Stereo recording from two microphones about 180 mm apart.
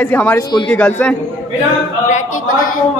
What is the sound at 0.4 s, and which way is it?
Speech, 25° left (ahead or behind).